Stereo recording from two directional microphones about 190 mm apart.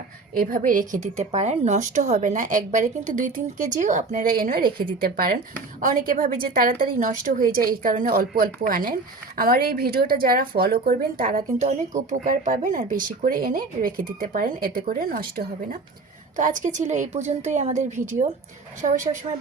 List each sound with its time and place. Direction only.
0.3 s a woman's voice: 45° right (ahead or behind)